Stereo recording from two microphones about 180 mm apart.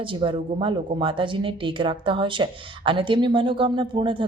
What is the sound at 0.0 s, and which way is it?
Speech, 30° right (ahead or behind).